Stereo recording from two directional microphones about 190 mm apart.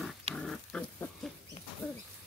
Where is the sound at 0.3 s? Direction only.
5° left (ahead or behind).